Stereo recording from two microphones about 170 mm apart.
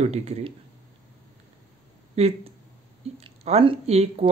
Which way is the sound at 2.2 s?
40° right (ahead or behind).